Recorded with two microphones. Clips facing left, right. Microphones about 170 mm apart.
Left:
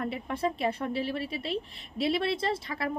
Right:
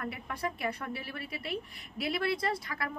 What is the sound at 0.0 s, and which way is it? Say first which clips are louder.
A woman's voice: left 6 dB; 25° left (ahead or behind).